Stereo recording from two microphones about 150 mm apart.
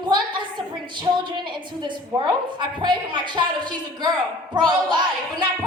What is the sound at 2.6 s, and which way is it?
Speech, 30° right (ahead or behind).